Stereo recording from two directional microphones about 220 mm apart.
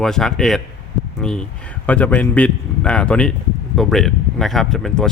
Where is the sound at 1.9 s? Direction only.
5° left (ahead or behind).